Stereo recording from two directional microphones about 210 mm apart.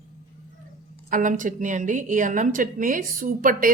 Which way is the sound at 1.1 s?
40° right (ahead or behind).